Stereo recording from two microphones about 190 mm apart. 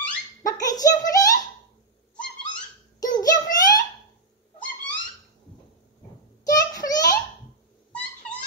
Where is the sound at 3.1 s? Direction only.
20° left (ahead or behind).